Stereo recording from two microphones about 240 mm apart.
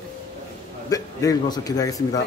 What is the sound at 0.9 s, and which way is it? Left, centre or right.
A man's voice, centre.